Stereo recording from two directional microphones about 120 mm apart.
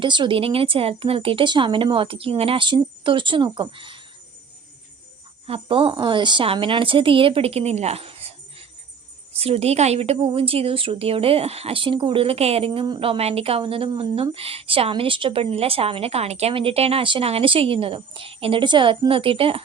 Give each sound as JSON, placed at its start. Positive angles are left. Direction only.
{"t": 0.0, "sound": "a woman's voice", "side_deg": -40}
{"t": 5.5, "sound": "a woman's voice", "side_deg": -50}
{"t": 9.4, "sound": "a woman's voice", "side_deg": -55}